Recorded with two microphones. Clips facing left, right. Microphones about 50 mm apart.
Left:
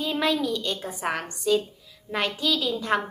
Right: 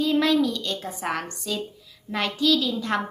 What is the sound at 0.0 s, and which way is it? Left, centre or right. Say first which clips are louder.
A woman's voice: right 4 dB; centre.